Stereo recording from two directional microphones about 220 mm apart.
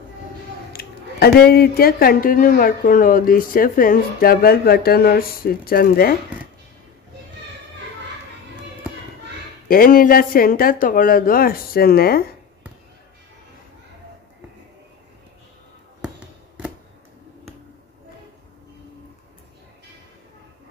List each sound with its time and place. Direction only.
0.7 s speech: 45° left (ahead or behind)
9.7 s speech: 40° left (ahead or behind)